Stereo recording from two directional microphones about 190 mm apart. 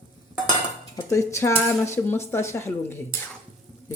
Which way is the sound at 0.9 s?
15° left (ahead or behind).